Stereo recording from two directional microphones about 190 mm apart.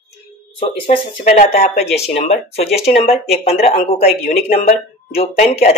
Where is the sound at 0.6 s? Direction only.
30° left (ahead or behind).